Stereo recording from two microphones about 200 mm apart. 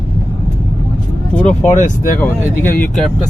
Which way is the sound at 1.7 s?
40° left (ahead or behind).